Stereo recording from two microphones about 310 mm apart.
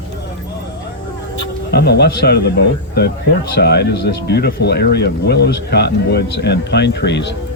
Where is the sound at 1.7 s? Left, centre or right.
Left.